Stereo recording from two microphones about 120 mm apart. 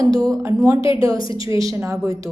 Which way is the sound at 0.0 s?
30° right (ahead or behind).